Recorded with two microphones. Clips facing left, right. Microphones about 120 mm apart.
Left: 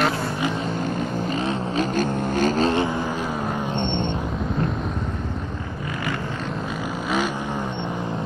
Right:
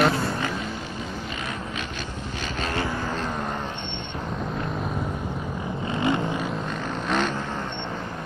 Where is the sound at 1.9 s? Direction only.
45° left (ahead or behind).